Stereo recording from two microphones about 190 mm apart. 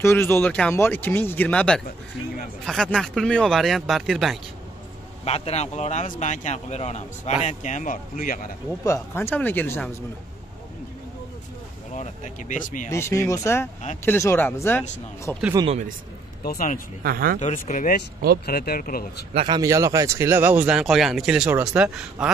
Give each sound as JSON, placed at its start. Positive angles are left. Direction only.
{"t": 0.0, "sound": "speech", "side_deg": 10}
{"t": 5.2, "sound": "speech", "side_deg": 35}
{"t": 8.8, "sound": "speech", "side_deg": 15}
{"t": 11.9, "sound": "speech", "side_deg": 40}
{"t": 12.9, "sound": "speech", "side_deg": 15}
{"t": 15.5, "sound": "speech", "side_deg": -25}
{"t": 16.4, "sound": "speech", "side_deg": 45}
{"t": 17.0, "sound": "speech", "side_deg": -50}
{"t": 17.4, "sound": "speech", "side_deg": 40}
{"t": 18.4, "sound": "speech", "side_deg": 55}
{"t": 19.3, "sound": "speech", "side_deg": -25}